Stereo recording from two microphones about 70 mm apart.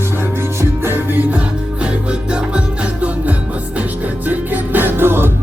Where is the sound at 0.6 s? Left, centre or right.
Right.